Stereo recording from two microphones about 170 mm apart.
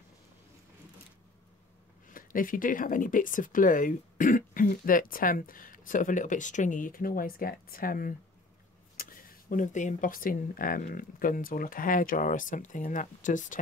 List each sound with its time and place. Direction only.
2.0 s speech: 55° left (ahead or behind)